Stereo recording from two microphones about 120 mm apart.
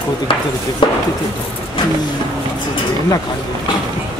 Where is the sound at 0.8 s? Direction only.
45° left (ahead or behind).